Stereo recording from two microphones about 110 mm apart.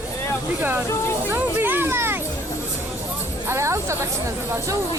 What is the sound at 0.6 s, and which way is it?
Speech, 20° right (ahead or behind).